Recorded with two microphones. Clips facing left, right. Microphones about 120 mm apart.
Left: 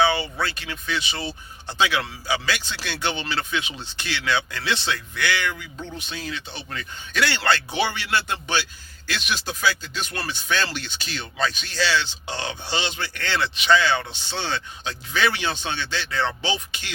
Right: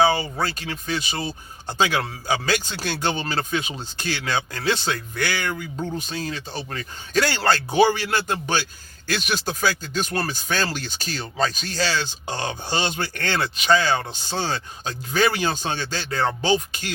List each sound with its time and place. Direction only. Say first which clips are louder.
0.0 s speech: right 2 dB; 40° right (ahead or behind)